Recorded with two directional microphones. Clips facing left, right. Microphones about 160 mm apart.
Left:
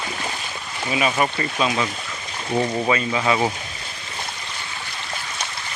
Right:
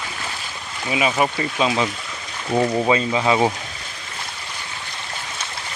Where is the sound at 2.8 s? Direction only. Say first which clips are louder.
Right 2 dB; 20° right (ahead or behind).